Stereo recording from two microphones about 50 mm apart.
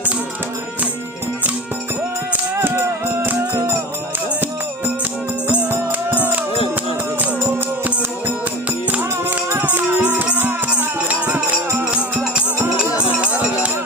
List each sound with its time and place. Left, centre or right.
3.5 s music: right
6.1 s music: right